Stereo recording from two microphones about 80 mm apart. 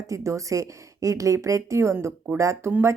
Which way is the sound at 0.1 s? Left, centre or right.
Right.